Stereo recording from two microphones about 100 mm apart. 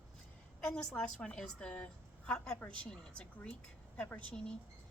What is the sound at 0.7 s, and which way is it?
A woman's voice, 10° left (ahead or behind).